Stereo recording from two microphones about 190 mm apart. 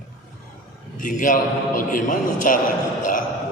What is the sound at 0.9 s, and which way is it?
A man's voice, 45° left (ahead or behind).